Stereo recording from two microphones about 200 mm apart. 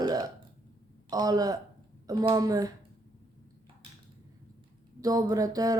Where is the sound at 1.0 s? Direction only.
20° right (ahead or behind).